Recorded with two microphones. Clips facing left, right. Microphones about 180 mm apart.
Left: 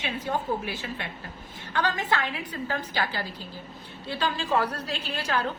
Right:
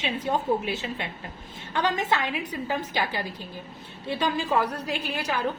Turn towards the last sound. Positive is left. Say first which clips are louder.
# even
turn(degrees=-15)  # may be behind; listen again after turning